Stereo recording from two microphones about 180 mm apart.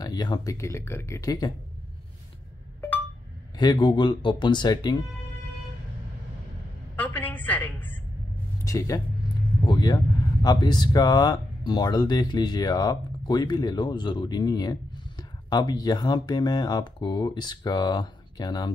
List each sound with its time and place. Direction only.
0.0 s speech: 20° left (ahead or behind)
3.5 s speech: 25° left (ahead or behind)
7.0 s a sound: 10° left (ahead or behind)
8.6 s speech: 20° left (ahead or behind)